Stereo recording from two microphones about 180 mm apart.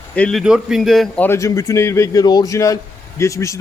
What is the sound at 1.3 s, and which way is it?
A man's voice, 15° left (ahead or behind).